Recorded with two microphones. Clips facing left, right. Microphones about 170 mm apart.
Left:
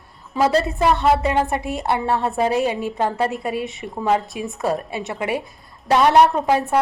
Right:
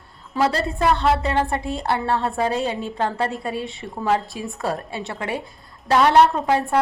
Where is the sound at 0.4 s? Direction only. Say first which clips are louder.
Left 3 dB; 20° left (ahead or behind).